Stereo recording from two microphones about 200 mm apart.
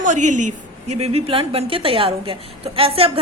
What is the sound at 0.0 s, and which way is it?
A woman's voice, 35° right (ahead or behind).